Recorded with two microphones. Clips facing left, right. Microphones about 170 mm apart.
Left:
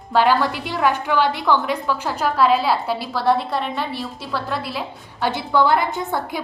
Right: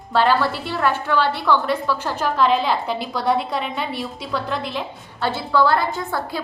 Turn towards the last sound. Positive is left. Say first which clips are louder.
# left 1 dB
turn(degrees=20)  # may be behind; listen again after turning